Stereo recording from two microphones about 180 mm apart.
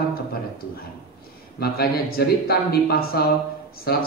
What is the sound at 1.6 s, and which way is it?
A man's voice, 60° left (ahead or behind).